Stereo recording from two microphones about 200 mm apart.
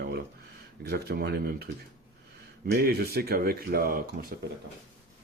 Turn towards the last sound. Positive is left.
turn(degrees=-45)  # may be behind; listen again after turning